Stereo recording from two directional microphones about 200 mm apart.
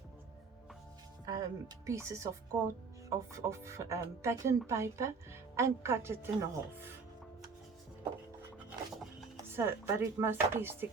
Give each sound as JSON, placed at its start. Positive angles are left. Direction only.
{"t": 1.2, "sound": "a woman's voice", "side_deg": -20}
{"t": 9.6, "sound": "a woman's voice", "side_deg": -10}